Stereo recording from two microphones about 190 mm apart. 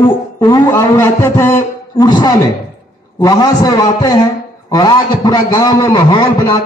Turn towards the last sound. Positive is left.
turn(degrees=20)  # may be behind; listen again after turning